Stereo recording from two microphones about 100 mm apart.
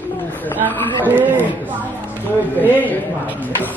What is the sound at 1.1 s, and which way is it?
Speech, 20° right (ahead or behind).